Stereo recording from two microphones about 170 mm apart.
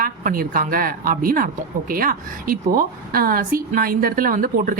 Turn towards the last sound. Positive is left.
turn(degrees=-55)  # may be behind; listen again after turning